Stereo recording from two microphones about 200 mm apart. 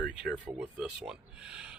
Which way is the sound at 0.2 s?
5° right (ahead or behind).